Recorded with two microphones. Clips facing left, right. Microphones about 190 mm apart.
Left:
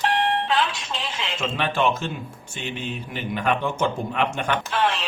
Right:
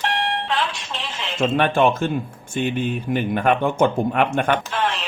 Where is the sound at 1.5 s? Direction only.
55° right (ahead or behind).